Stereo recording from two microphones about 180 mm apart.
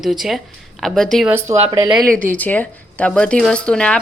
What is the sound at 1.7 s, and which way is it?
Speech, 25° right (ahead or behind).